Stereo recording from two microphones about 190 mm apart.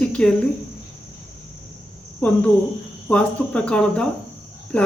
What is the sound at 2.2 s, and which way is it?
Cricket, 10° left (ahead or behind).